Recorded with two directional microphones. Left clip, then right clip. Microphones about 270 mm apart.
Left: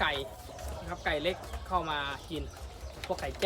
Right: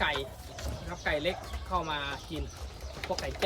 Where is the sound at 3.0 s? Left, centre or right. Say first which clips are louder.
Even; right.